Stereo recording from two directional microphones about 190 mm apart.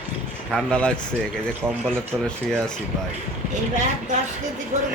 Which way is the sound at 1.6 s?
10° right (ahead or behind).